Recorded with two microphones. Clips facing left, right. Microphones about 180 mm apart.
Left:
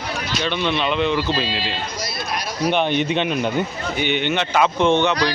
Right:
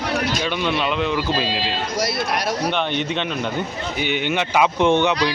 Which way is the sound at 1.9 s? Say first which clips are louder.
Right 5 dB; 70° right (ahead or behind).